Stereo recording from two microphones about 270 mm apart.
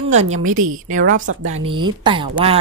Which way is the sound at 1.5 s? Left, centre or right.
Centre.